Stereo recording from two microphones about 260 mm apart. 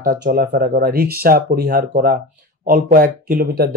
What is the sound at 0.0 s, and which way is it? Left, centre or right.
Speech, right.